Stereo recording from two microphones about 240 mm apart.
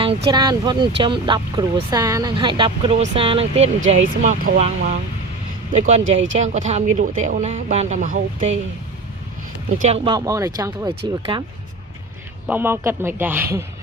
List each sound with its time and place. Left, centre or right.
0.3 s speech: centre
6.0 s speech: right
6.4 s speech: right
9.7 s speech: right
12.5 s speech: centre